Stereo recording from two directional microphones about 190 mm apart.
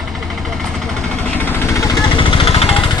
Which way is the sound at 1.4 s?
15° left (ahead or behind).